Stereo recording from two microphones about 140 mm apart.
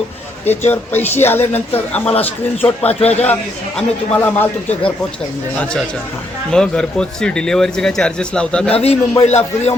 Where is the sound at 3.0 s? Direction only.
45° left (ahead or behind).